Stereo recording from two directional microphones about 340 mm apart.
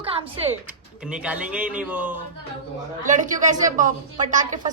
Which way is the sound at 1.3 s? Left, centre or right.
Centre.